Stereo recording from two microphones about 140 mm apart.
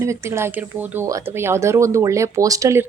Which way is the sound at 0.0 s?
20° right (ahead or behind).